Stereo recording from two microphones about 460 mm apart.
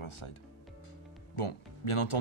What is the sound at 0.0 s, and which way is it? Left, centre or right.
Speech, left.